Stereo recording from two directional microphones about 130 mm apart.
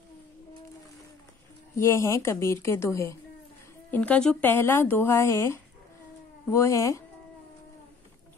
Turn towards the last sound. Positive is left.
turn(degrees=25)  # may be behind; listen again after turning